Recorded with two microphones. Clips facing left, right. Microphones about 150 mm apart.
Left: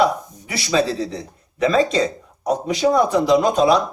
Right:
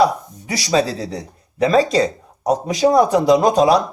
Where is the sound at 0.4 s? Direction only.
40° right (ahead or behind).